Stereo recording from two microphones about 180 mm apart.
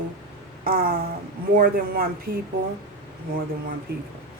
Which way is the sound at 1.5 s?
55° right (ahead or behind).